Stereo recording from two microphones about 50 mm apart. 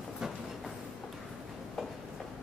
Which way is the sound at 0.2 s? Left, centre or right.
Centre.